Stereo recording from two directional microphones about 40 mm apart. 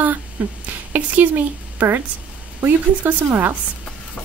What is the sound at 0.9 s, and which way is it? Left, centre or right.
A woman's voice, right.